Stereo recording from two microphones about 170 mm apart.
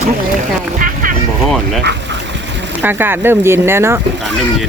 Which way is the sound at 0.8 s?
55° right (ahead or behind).